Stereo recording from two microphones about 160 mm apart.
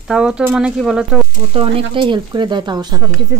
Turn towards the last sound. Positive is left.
turn(degrees=-25)  # may be behind; listen again after turning